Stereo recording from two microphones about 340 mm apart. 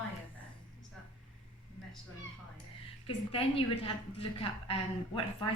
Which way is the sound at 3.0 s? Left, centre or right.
Centre.